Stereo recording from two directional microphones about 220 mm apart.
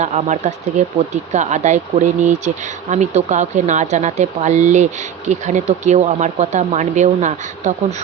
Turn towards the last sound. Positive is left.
turn(degrees=-35)  # may be behind; listen again after turning